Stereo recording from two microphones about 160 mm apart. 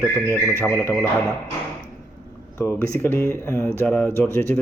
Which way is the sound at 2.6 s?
15° left (ahead or behind).